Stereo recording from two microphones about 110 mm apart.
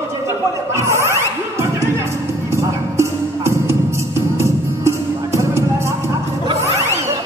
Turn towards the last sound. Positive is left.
turn(degrees=-25)  # may be behind; listen again after turning